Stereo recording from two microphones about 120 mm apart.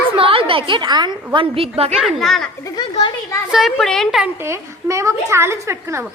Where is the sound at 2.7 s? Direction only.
40° left (ahead or behind).